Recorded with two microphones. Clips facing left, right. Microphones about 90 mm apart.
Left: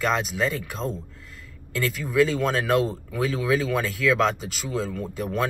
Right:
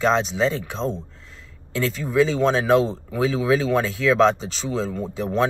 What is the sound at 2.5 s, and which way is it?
Speech, 25° right (ahead or behind).